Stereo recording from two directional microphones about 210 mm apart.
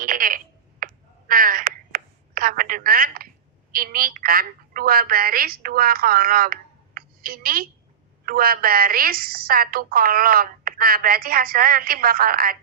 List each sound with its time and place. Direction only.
0.0 s a sound: 40° right (ahead or behind)
1.3 s telephone: 40° right (ahead or behind)
3.7 s a woman's voice: 45° right (ahead or behind)